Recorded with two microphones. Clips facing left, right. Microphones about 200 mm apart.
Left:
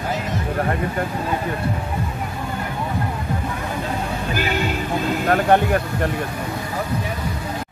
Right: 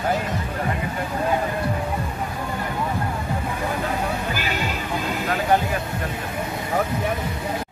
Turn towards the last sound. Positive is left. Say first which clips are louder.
# left 5 dB
turn(degrees=55)  # may be behind; listen again after turning